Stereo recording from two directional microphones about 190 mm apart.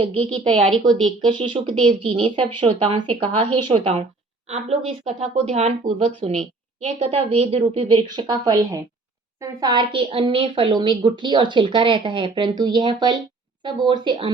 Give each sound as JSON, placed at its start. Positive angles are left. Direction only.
{"t": 0.5, "sound": "speech", "side_deg": 0}
{"t": 1.8, "sound": "a woman's voice", "side_deg": -30}